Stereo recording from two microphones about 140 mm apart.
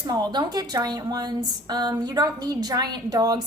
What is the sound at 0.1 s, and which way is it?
A woman's voice, 30° right (ahead or behind).